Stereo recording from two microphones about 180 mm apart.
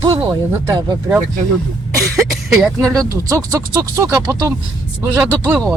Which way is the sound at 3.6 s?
15° right (ahead or behind).